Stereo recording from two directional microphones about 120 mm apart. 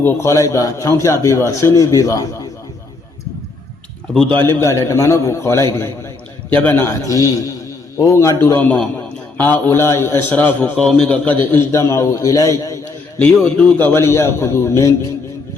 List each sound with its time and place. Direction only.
0.0 s a man's voice: 25° left (ahead or behind)
4.1 s a man's voice: 5° left (ahead or behind)
4.4 s a man's voice: 20° left (ahead or behind)
7.9 s a man's voice: 25° left (ahead or behind)
13.1 s a man's voice: 10° left (ahead or behind)